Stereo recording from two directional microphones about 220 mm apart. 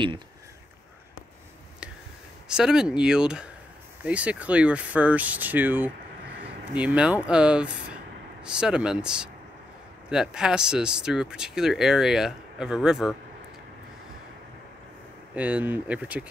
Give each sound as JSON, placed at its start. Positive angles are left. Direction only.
{"t": 2.4, "sound": "speech", "side_deg": -5}
{"t": 15.3, "sound": "speech", "side_deg": -5}